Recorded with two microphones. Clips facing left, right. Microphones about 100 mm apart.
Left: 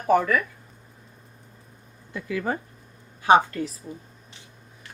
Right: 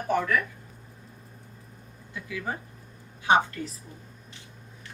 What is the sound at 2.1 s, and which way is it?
Speech, 60° left (ahead or behind).